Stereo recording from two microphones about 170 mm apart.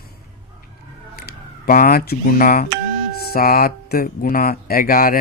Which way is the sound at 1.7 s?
55° left (ahead or behind).